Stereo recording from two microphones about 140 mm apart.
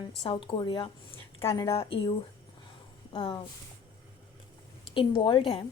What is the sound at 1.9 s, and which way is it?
A woman's voice, 40° left (ahead or behind).